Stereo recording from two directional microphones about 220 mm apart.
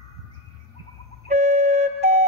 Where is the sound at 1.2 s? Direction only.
35° right (ahead or behind).